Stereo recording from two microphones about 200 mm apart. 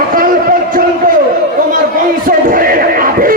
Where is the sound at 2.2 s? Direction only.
45° right (ahead or behind).